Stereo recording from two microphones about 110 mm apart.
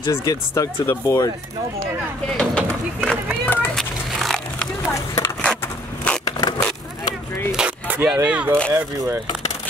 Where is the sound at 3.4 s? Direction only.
20° left (ahead or behind).